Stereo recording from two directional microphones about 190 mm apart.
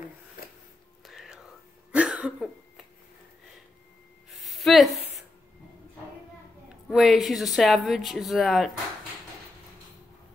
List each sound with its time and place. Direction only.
1.0 s whispering: centre (ahead or behind)
1.9 s cough: 5° right (ahead or behind)
4.4 s a sound: centre (ahead or behind)
6.9 s speech: centre (ahead or behind)